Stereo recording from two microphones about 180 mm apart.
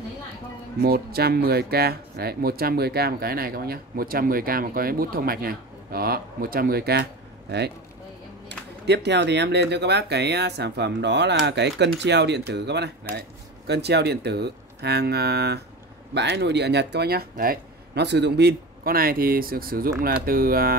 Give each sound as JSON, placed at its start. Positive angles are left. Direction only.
{"t": 0.7, "sound": "speech", "side_deg": -60}
{"t": 8.5, "sound": "speech", "side_deg": -70}